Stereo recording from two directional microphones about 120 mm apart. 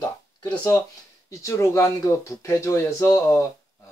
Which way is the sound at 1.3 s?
25° left (ahead or behind).